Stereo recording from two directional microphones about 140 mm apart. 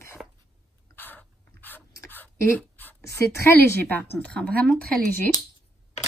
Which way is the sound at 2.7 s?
20° left (ahead or behind).